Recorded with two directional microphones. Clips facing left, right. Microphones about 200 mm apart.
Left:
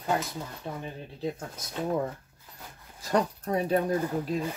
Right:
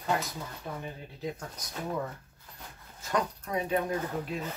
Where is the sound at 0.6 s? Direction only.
25° left (ahead or behind).